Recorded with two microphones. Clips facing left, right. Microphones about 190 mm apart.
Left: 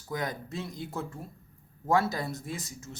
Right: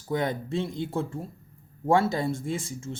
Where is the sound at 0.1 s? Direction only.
25° right (ahead or behind).